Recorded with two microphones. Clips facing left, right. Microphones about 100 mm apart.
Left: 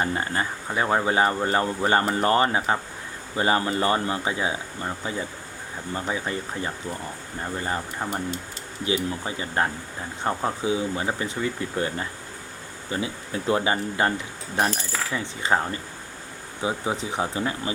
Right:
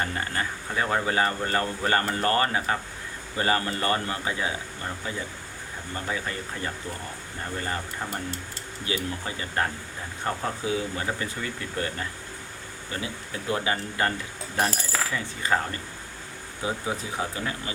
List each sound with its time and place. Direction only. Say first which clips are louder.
0.0 s speech: left 4 dB; 25° left (ahead or behind)
5.9 s speech: left 4 dB; 20° left (ahead or behind)
14.7 s cutlery: even; centre (ahead or behind)
15.1 s speech: left 4 dB; 25° left (ahead or behind)